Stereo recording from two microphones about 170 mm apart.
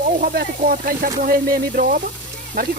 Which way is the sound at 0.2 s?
55° right (ahead or behind).